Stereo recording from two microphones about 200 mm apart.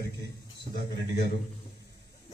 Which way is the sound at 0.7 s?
55° left (ahead or behind).